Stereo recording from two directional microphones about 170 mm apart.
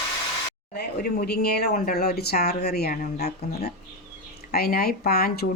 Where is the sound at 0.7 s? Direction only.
65° left (ahead or behind).